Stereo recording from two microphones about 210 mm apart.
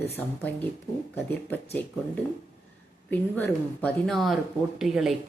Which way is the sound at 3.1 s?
10° left (ahead or behind).